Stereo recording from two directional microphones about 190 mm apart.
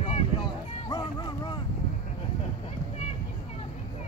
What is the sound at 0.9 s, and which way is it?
Music, 20° left (ahead or behind).